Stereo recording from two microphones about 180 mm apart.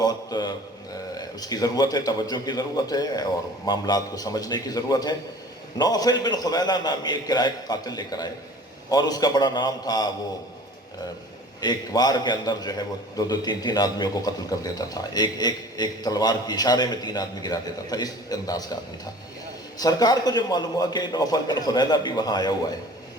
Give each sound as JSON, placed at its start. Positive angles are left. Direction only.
{"t": 0.0, "sound": "mantra", "side_deg": 20}
{"t": 1.1, "sound": "a man's voice", "side_deg": 20}
{"t": 11.6, "sound": "a man's voice", "side_deg": 20}
{"t": 19.8, "sound": "a man's voice", "side_deg": 20}